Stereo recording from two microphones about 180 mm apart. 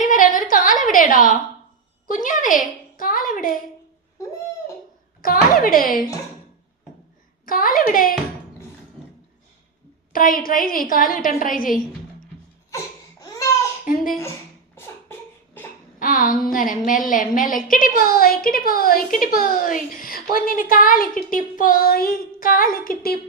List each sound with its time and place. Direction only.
0.0 s a sound: 45° left (ahead or behind)
2.0 s a woman's voice: 45° left (ahead or behind)
5.2 s a woman's voice: 55° left (ahead or behind)
7.4 s a woman's voice: 50° left (ahead or behind)
10.1 s a woman's voice: 50° left (ahead or behind)
12.7 s laughter: 20° left (ahead or behind)
14.8 s a sound: 10° left (ahead or behind)
16.0 s a sound: 50° left (ahead or behind)
16.5 s a woman's voice: 50° left (ahead or behind)